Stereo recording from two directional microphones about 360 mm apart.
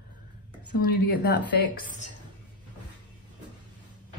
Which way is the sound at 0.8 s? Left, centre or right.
Left.